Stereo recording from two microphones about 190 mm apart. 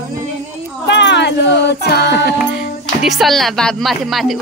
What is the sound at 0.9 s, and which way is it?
Child singing, 65° left (ahead or behind).